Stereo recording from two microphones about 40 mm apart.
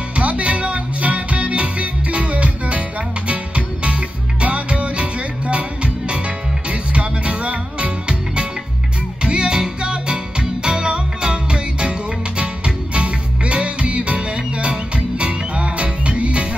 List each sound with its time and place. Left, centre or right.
0.1 s music: right
9.2 s music: right